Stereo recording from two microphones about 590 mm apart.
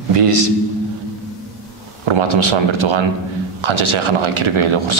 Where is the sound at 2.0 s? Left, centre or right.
Right.